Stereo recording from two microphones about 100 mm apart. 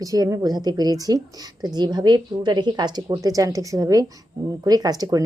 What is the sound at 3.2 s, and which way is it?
A woman's voice, 35° right (ahead or behind).